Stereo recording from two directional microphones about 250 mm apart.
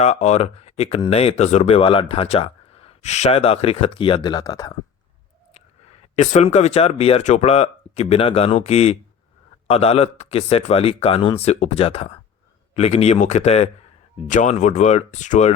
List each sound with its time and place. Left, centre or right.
0.0 s speech: left
6.1 s speech: left